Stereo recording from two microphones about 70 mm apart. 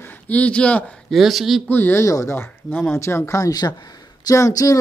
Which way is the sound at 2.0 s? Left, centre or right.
Left.